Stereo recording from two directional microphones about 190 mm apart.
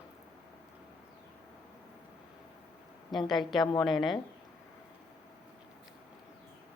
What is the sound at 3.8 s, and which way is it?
Speech, centre (ahead or behind).